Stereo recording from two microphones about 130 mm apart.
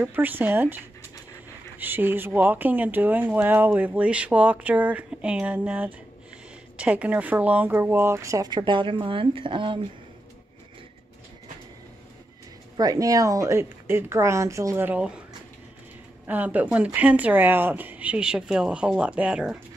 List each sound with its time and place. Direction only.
0.0 s speech: 15° right (ahead or behind); by 9.8 s 40° right (ahead or behind)
12.7 s speech: 30° right (ahead or behind)
14.9 s speech: 10° right (ahead or behind)
16.3 s speech: 10° right (ahead or behind)